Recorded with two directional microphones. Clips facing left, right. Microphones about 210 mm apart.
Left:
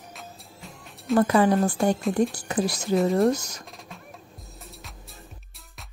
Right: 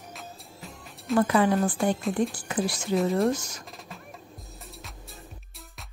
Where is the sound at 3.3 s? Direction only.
40° left (ahead or behind).